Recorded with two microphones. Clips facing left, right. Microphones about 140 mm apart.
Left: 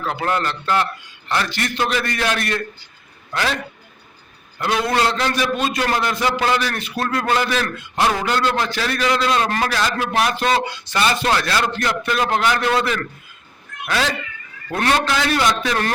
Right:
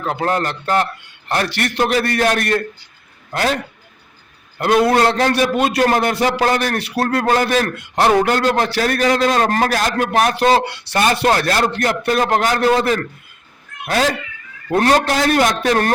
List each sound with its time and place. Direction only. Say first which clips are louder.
0.0 s a man's voice: right 2 dB; 40° right (ahead or behind); by 1.8 s 60° right (ahead or behind)
1.8 s a man's voice: right 6 dB; 40° right (ahead or behind)
4.5 s a man's voice: right 6 dB; 50° right (ahead or behind)
5.4 s a man's voice: right 5 dB; 65° right (ahead or behind)
5.8 s a man's voice: right 6 dB; 50° right (ahead or behind)
7.8 s a man's voice: right 6 dB; 55° right (ahead or behind)